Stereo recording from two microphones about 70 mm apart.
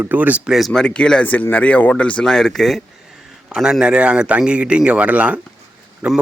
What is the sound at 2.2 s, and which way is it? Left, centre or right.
Speech, centre.